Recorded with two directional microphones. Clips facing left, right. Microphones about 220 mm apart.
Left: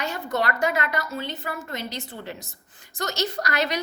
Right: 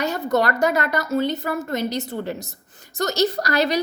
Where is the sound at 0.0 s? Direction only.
40° right (ahead or behind).